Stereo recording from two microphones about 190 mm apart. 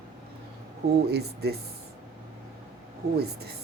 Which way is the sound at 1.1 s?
55° right (ahead or behind).